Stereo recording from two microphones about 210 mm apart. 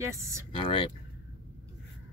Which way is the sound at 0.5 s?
25° left (ahead or behind).